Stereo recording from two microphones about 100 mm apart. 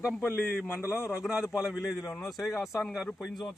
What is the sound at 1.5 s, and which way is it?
Speech, 5° right (ahead or behind).